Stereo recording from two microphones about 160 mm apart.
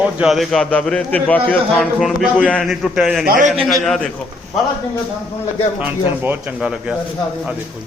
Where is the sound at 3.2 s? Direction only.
60° right (ahead or behind).